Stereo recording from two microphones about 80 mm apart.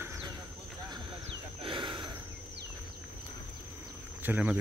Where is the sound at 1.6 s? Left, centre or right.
Right.